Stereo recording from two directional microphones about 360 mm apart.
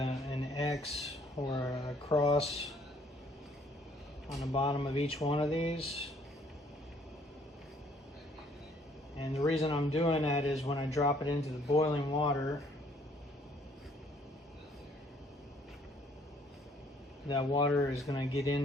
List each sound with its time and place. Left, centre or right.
0.0 s a sound: centre
4.5 s speech: centre
9.1 s speech: centre
17.2 s speech: centre